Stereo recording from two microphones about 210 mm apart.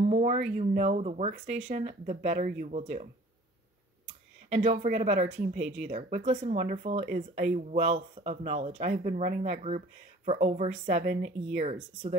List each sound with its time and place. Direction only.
0.0 s speech: 35° right (ahead or behind)
4.5 s speech: 30° right (ahead or behind)